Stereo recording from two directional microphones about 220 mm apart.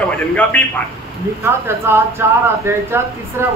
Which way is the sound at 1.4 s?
10° right (ahead or behind).